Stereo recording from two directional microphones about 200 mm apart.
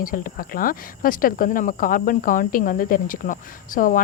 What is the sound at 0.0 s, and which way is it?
Speech, 45° left (ahead or behind).